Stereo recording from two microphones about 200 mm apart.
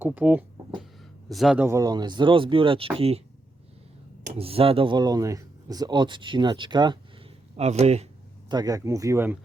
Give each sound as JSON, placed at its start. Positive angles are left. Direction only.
{"t": 0.0, "sound": "speech", "side_deg": -10}
{"t": 4.3, "sound": "speech", "side_deg": -30}
{"t": 8.4, "sound": "speech", "side_deg": -20}